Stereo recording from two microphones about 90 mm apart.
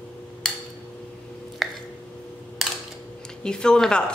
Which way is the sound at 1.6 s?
Centre (ahead or behind).